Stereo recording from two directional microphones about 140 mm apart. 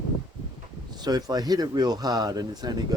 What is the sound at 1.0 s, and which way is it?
Speech, 30° right (ahead or behind).